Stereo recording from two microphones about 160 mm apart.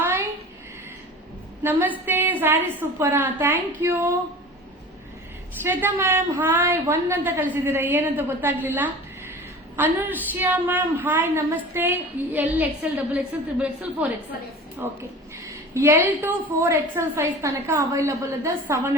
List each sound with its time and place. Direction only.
1.6 s a woman's voice: 10° right (ahead or behind)
5.6 s a woman's voice: 15° right (ahead or behind)